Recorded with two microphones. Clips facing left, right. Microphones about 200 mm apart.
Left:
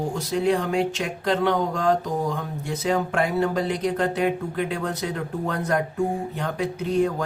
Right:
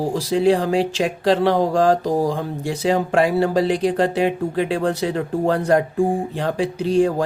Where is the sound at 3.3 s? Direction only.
30° right (ahead or behind).